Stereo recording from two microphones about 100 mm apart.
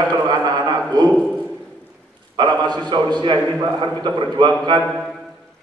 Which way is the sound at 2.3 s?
45° right (ahead or behind).